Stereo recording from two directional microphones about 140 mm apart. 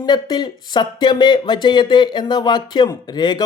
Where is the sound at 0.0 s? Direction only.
30° left (ahead or behind).